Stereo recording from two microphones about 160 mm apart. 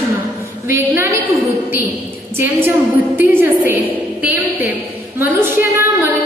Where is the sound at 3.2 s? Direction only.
15° right (ahead or behind).